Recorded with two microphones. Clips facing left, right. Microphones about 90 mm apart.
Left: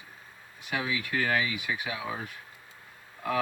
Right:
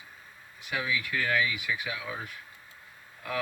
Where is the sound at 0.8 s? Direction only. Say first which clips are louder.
Left 1 dB; 30° left (ahead or behind).